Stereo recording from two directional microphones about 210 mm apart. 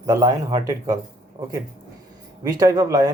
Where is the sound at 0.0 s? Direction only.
15° right (ahead or behind).